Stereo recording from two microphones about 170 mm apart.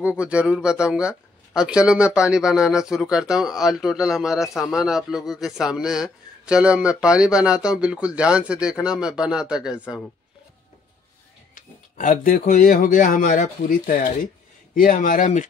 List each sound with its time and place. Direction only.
0.0 s speech: 5° right (ahead or behind)
11.5 s speech: 50° left (ahead or behind)